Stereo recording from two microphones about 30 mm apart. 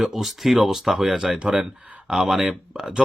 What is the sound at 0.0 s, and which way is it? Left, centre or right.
Speech, centre.